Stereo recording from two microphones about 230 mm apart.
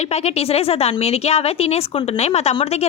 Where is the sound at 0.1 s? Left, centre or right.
Left.